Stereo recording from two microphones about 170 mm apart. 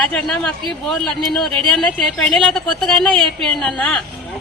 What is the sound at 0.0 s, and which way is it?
Speech, 5° left (ahead or behind).